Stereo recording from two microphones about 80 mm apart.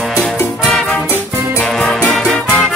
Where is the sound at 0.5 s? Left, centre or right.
Centre.